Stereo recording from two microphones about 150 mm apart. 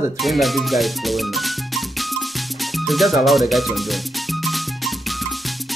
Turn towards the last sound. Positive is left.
turn(degrees=0)  # may be behind; listen again after turning